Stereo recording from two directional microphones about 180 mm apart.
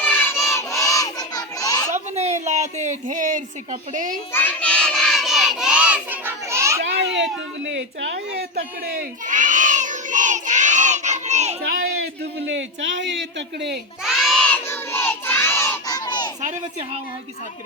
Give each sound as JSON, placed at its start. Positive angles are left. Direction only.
{"t": 0.0, "sound": "crowd", "side_deg": 10}
{"t": 2.1, "sound": "a woman's voice", "side_deg": -40}
{"t": 4.3, "sound": "crowd", "side_deg": 10}
{"t": 6.8, "sound": "a sound", "side_deg": -80}
{"t": 11.6, "sound": "crowd", "side_deg": -55}
{"t": 12.5, "sound": "a man's voice", "side_deg": -90}
{"t": 14.0, "sound": "crowd", "side_deg": 0}
{"t": 16.4, "sound": "a child's voice", "side_deg": -40}